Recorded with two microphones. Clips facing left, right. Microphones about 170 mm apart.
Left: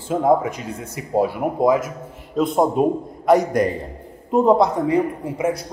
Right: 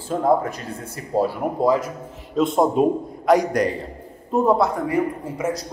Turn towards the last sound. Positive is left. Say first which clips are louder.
# left 2 dB
turn(degrees=15)  # may be behind; listen again after turning